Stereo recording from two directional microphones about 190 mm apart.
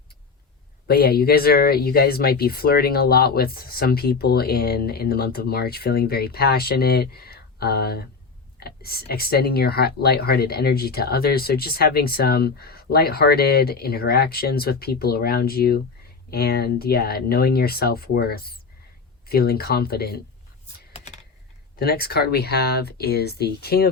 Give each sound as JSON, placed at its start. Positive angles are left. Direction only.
{"t": 0.9, "sound": "speech", "side_deg": 55}
{"t": 21.8, "sound": "speech", "side_deg": 55}